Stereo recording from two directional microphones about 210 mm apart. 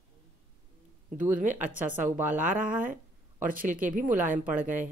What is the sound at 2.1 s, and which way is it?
Speech, 10° right (ahead or behind).